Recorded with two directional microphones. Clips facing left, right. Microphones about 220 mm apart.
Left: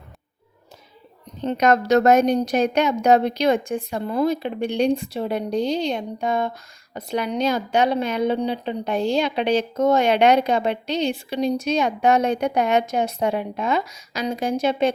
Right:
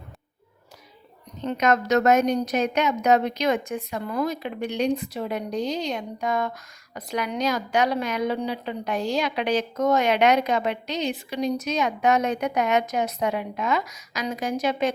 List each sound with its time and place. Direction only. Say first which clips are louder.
1.4 s a woman's voice: left 4 dB; 35° left (ahead or behind)